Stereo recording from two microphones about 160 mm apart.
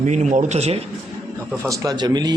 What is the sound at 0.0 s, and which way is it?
Speech, 50° right (ahead or behind).